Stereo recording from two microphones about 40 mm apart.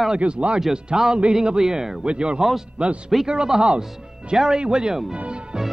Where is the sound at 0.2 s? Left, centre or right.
Right; by 2.0 s centre.